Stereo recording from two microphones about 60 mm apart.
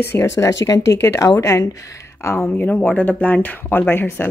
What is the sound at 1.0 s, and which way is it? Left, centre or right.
Speech, left.